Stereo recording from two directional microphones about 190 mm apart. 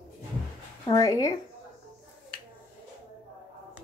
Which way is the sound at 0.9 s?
15° left (ahead or behind).